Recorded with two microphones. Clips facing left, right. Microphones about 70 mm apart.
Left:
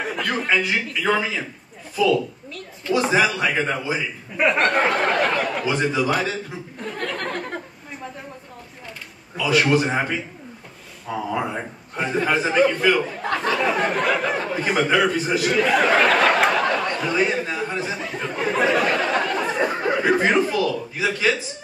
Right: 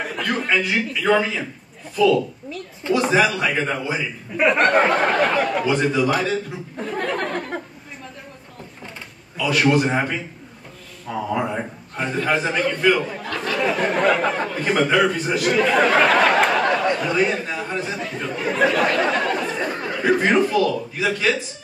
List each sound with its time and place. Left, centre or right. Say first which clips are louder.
0.0 s a man's voice: even; centre
7.2 s chatter: right 2 dB; centre
9.4 s a man's voice: right 1 dB; centre
13.2 s speech: left 4 dB; left
13.5 s a man's voice: right 1 dB; centre
19.4 s a sound: left 3 dB; centre
20.1 s a man's voice: right 3 dB; centre